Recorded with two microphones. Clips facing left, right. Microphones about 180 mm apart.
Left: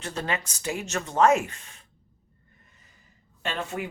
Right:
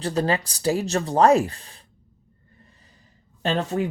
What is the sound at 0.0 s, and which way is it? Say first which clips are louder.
Speech: right 8 dB; 35° right (ahead or behind).